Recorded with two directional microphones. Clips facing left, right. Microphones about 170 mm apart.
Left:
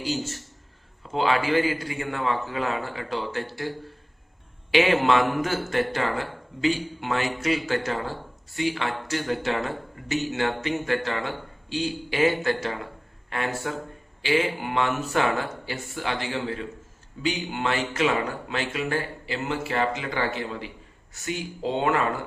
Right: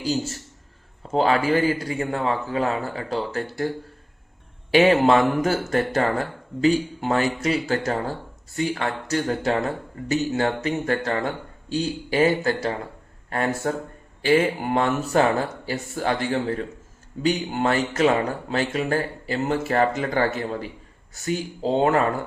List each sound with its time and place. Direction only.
1.1 s speech: 40° right (ahead or behind)
4.7 s speech: 40° right (ahead or behind)